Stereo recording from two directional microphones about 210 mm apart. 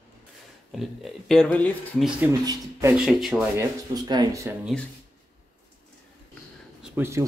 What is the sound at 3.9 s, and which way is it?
Speech, 20° right (ahead or behind).